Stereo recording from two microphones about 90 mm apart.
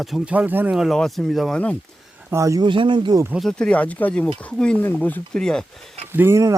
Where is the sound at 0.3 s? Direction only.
20° right (ahead or behind).